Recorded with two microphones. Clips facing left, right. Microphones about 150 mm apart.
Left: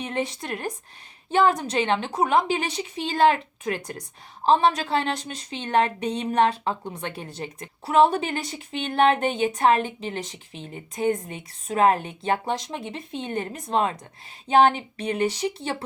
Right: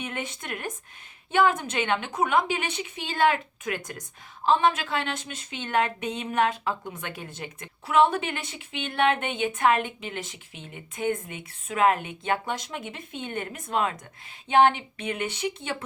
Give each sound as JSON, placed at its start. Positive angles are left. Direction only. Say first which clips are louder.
{"t": 0.0, "sound": "a woman's voice", "louder": "left 6 dB", "side_deg": 35}